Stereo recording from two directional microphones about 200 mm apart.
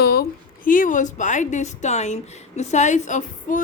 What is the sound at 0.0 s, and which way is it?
A woman's voice, 50° left (ahead or behind).